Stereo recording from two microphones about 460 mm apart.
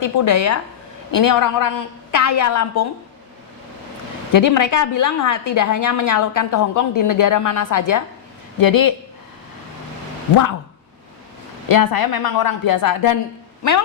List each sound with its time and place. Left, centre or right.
0.0 s a woman's voice: left
4.3 s a woman's voice: left
11.7 s a woman's voice: left